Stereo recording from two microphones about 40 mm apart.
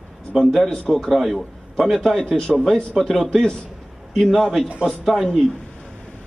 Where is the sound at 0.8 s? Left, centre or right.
Centre.